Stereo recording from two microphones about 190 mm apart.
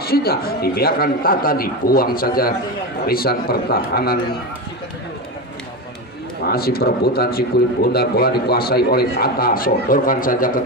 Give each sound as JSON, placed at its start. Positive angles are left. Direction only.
{"t": 0.0, "sound": "a man's voice", "side_deg": 55}
{"t": 6.4, "sound": "a man's voice", "side_deg": 55}